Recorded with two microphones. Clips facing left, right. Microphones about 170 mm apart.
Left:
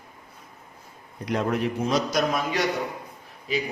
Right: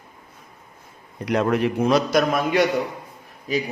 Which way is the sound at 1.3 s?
80° right.